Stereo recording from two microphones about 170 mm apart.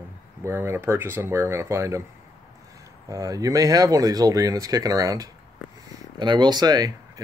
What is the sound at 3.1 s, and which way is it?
Speech, 20° right (ahead or behind).